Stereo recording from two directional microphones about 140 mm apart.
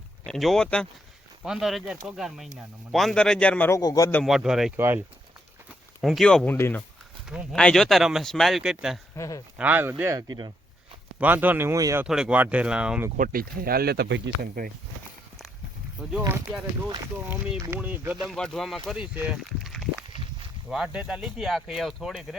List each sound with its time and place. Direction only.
0.3 s speech: centre (ahead or behind)
3.7 s a man's voice: 25° left (ahead or behind)
4.2 s speech: 5° right (ahead or behind)
4.8 s speech: 15° right (ahead or behind)
6.0 s speech: centre (ahead or behind)
9.1 s a man's voice: 25° left (ahead or behind)
9.6 s speech: 10° right (ahead or behind)
10.0 s speech: 25° right (ahead or behind)
11.2 s speech: 15° right (ahead or behind)
12.0 s speech: 5° right (ahead or behind)
13.1 s speech: 90° right
16.0 s speech: 5° right (ahead or behind)
17.2 s speech: 10° right (ahead or behind)
18.3 s speech: 5° left (ahead or behind)